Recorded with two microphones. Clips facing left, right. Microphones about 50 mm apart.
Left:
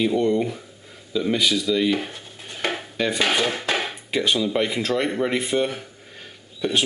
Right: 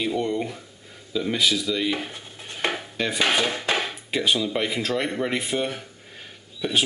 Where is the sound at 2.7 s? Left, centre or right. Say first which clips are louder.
Left 3 dB; centre.